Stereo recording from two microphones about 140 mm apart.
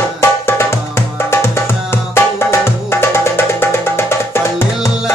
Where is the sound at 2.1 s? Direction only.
20° left (ahead or behind).